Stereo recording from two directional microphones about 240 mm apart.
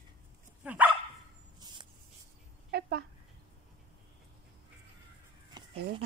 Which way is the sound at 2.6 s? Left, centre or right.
Right.